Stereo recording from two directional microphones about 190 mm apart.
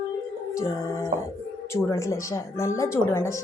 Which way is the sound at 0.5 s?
15° left (ahead or behind).